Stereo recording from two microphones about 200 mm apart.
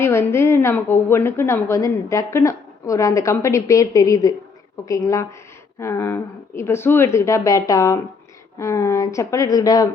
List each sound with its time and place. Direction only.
0.0 s a woman's voice: 15° left (ahead or behind)